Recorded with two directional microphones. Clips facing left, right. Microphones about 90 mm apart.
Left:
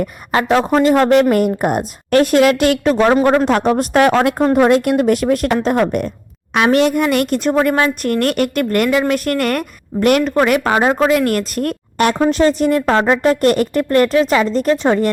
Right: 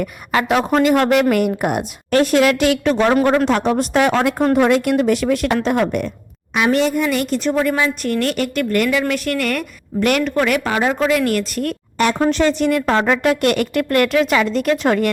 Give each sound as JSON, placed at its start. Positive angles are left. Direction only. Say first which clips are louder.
{"t": 0.0, "sound": "a woman's voice", "louder": "left 2 dB", "side_deg": 30}
{"t": 3.1, "sound": "speech", "louder": "left 2 dB", "side_deg": 25}
{"t": 3.4, "sound": "speech", "louder": "left 2 dB", "side_deg": 45}
{"t": 6.5, "sound": "a woman's voice", "louder": "left 3 dB", "side_deg": 60}